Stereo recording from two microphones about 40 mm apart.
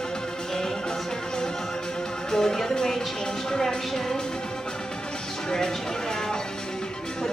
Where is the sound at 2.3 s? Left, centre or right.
Centre.